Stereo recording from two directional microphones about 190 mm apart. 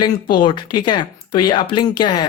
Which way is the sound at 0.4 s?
25° left (ahead or behind).